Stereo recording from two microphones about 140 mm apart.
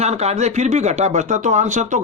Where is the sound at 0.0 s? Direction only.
50° right (ahead or behind).